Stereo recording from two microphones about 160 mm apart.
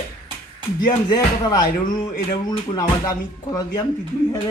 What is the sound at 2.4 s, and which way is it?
Speech, 25° left (ahead or behind).